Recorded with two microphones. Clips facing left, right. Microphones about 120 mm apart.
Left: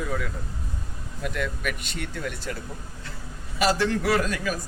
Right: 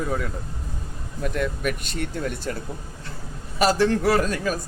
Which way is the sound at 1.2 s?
40° right (ahead or behind).